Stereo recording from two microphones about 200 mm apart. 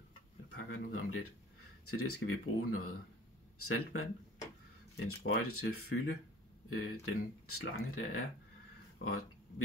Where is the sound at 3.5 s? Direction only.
90° left.